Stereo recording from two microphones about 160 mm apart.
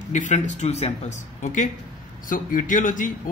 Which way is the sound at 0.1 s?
45° left (ahead or behind).